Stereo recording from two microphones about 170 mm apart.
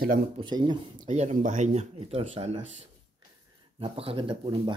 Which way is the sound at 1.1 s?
40° right (ahead or behind).